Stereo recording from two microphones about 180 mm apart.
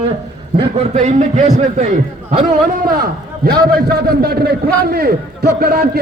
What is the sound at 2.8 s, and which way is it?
A man's voice, 55° right (ahead or behind).